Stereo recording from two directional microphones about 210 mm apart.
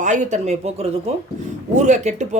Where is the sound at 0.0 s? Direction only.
35° right (ahead or behind).